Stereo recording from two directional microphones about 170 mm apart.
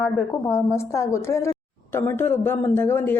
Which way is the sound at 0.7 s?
15° left (ahead or behind).